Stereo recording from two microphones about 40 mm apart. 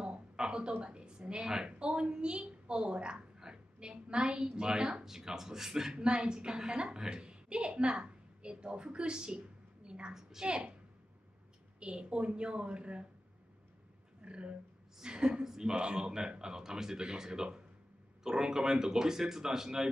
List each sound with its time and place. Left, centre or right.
0.4 s a woman's voice: right
5.9 s a woman's voice: right
11.8 s a woman's voice: right
14.2 s a woman's voice: right